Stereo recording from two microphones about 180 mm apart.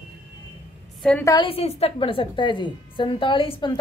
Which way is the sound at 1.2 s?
25° left (ahead or behind).